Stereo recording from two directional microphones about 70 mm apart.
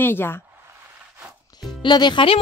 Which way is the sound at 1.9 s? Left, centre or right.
Left.